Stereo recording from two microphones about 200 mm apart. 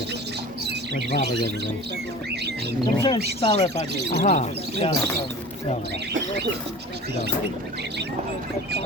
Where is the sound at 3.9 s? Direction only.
55° right (ahead or behind).